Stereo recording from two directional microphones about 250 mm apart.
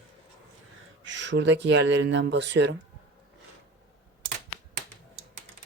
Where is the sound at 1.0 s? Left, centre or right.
Right.